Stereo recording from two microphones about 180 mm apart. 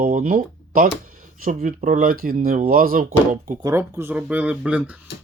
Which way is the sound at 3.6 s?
15° right (ahead or behind).